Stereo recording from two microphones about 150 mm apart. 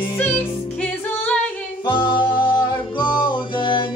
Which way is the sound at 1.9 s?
30° left (ahead or behind).